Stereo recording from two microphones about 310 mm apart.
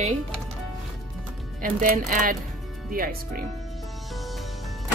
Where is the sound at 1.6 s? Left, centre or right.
Right.